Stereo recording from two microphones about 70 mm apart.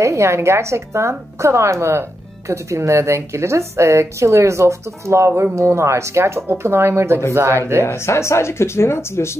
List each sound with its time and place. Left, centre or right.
0.0 s speech: right
7.8 s speech: left